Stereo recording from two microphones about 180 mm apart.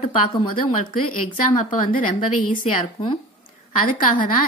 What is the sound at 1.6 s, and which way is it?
Speech, 45° left (ahead or behind).